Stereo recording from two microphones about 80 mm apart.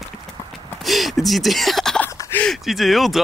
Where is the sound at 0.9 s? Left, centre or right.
Centre.